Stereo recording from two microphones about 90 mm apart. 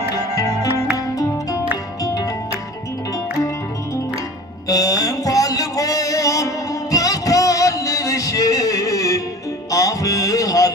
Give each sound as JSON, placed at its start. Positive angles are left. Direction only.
{"t": 0.1, "sound": "music", "side_deg": 40}
{"t": 4.7, "sound": "music", "side_deg": 40}